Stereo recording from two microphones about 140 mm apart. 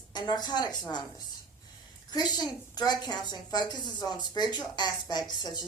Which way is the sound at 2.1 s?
30° left (ahead or behind).